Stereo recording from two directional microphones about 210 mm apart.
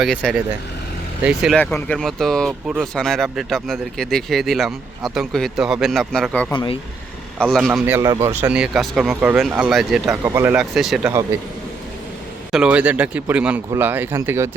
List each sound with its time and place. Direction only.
0.0 s speech: centre (ahead or behind)
6.5 s speech: 20° left (ahead or behind)
7.3 s speech: 5° left (ahead or behind)
12.5 s speech: 5° right (ahead or behind)